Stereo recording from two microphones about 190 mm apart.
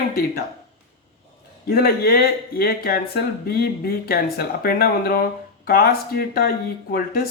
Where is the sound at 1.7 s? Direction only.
55° left (ahead or behind).